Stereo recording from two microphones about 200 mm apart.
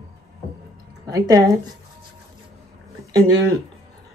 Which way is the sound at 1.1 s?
15° right (ahead or behind).